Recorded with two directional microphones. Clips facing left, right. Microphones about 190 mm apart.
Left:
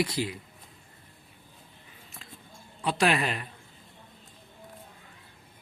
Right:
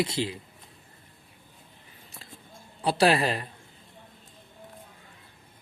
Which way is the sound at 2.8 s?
35° right (ahead or behind).